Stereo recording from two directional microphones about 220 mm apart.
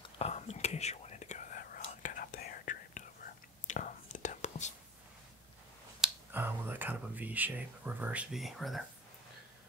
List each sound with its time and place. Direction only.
0.2 s whispering: 30° left (ahead or behind)
5.9 s whispering: 5° right (ahead or behind)